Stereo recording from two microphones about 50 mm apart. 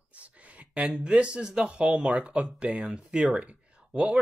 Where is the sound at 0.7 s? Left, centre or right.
Centre.